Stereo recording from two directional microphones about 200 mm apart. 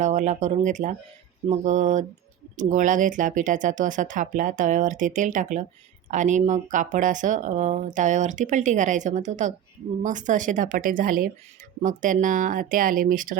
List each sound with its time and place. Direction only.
0.0 s speech: 35° right (ahead or behind)